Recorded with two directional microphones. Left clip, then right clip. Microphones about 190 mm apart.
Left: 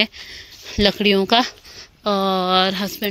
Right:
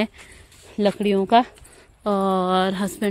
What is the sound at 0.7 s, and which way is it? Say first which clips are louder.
Speech: left 4 dB; 5° left (ahead or behind).